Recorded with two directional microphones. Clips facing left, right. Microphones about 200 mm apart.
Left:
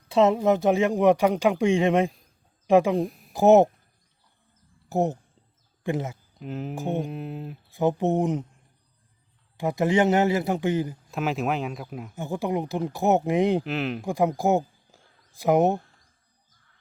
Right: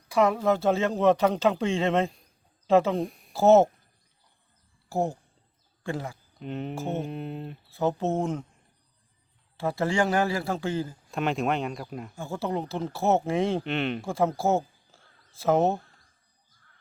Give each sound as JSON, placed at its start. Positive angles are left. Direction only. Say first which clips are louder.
{"t": 0.1, "sound": "speech", "louder": "left 3 dB", "side_deg": 25}
{"t": 2.9, "sound": "speech", "louder": "left 3 dB", "side_deg": 0}
{"t": 3.3, "sound": "speech", "louder": "left 2 dB", "side_deg": 15}
{"t": 4.9, "sound": "a man's voice", "louder": "left 3 dB", "side_deg": 20}
{"t": 6.4, "sound": "speech", "louder": "left 1 dB", "side_deg": 0}
{"t": 7.7, "sound": "speech", "louder": "left 3 dB", "side_deg": 15}
{"t": 9.6, "sound": "a man's voice", "louder": "left 4 dB", "side_deg": 15}
{"t": 11.1, "sound": "speech", "louder": "right 1 dB", "side_deg": 0}
{"t": 12.1, "sound": "speech", "louder": "left 3 dB", "side_deg": 20}
{"t": 13.7, "sound": "speech", "louder": "even", "side_deg": 0}
{"t": 14.0, "sound": "speech", "louder": "left 5 dB", "side_deg": 15}